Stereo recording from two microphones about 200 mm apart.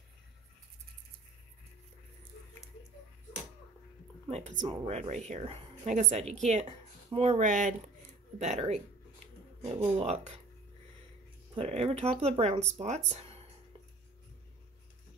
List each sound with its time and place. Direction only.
4.3 s speech: 35° right (ahead or behind)
11.5 s speech: 30° right (ahead or behind)